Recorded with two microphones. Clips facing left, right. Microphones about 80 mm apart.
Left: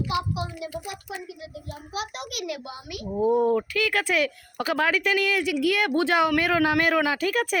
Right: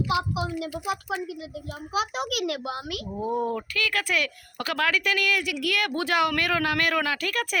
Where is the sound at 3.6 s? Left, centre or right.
Centre.